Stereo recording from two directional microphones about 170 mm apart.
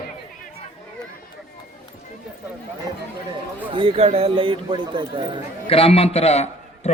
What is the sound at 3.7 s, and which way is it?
Speech, 30° right (ahead or behind).